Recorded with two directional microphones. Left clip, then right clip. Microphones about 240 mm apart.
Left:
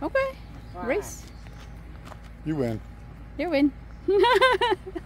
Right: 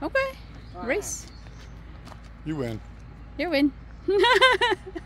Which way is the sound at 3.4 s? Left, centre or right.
Centre.